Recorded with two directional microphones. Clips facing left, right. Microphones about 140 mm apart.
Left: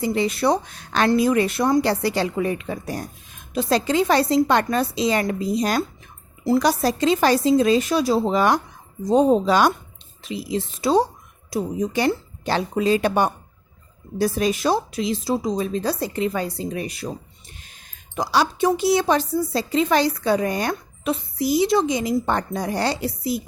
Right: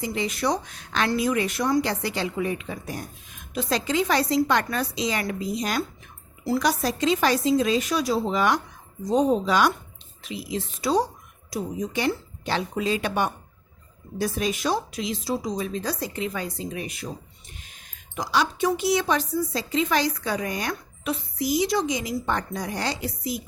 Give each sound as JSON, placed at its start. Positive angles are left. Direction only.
{"t": 0.0, "sound": "speech", "side_deg": 35}
{"t": 18.2, "sound": "speech", "side_deg": 35}